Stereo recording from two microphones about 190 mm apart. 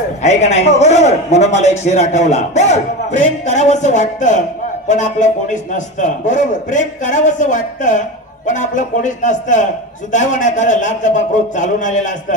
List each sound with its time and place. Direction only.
0.2 s a man's voice: 35° left (ahead or behind)